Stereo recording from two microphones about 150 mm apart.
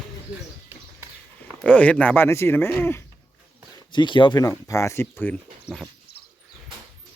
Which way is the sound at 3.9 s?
30° left (ahead or behind).